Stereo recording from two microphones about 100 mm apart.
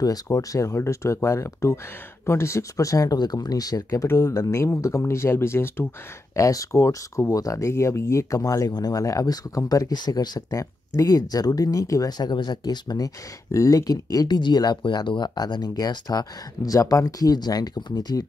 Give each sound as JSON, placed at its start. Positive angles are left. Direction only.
{"t": 0.0, "sound": "speech", "side_deg": 35}